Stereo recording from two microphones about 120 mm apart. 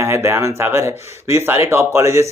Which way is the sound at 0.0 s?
20° right (ahead or behind).